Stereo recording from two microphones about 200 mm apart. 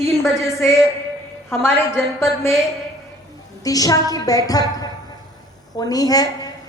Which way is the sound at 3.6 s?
20° left (ahead or behind).